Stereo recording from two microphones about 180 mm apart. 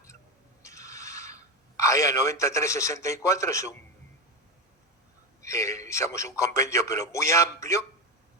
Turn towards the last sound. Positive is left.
turn(degrees=15)  # may be behind; listen again after turning